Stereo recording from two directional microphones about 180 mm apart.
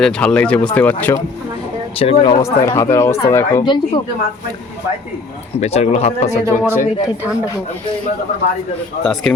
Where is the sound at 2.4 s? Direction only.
15° left (ahead or behind).